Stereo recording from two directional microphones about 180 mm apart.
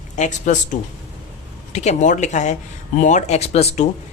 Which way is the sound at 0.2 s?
40° left (ahead or behind).